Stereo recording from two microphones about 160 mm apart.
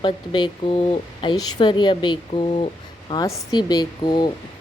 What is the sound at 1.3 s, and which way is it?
A woman's voice, 25° left (ahead or behind).